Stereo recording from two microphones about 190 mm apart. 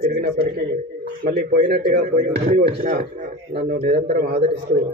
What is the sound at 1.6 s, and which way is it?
A man's voice, 55° right (ahead or behind).